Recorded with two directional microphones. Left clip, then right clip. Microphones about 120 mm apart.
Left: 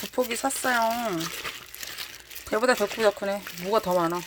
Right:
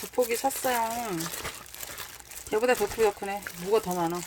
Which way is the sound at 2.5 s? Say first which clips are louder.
Left 2 dB; centre (ahead or behind).